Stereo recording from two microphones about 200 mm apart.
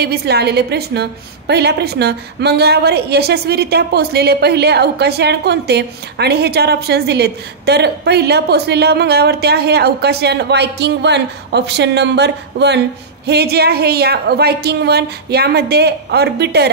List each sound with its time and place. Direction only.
0.0 s a woman's voice: 55° right (ahead or behind)